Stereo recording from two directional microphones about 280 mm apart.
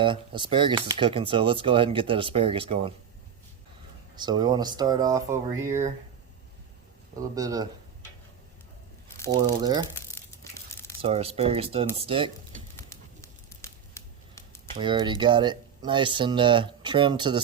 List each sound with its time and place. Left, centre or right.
0.0 s speech: centre
4.1 s speech: centre
7.3 s speech: centre
9.6 s speech: centre
9.9 s crumpling: centre
11.0 s speech: right
12.7 s a sound: centre
14.8 s speech: centre